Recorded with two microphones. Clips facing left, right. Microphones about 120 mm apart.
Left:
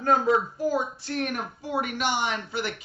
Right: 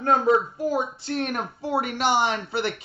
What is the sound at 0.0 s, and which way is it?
Speech, 25° right (ahead or behind).